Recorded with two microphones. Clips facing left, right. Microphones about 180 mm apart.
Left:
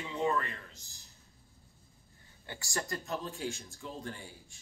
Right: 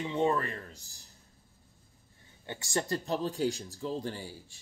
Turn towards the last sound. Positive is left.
turn(degrees=-30)  # may be behind; listen again after turning